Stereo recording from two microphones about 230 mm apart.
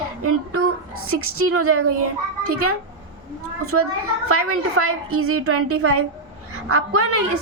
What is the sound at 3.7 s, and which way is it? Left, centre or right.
A woman's voice, right.